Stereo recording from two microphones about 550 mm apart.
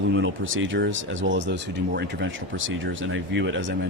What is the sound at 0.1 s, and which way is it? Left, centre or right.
Speech, right.